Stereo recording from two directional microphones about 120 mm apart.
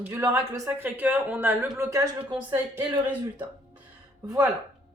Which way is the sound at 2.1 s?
15° right (ahead or behind).